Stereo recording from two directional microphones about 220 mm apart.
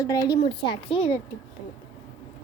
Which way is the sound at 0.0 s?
15° left (ahead or behind).